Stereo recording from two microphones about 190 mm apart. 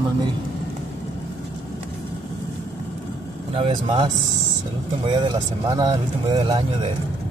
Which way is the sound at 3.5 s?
30° right (ahead or behind).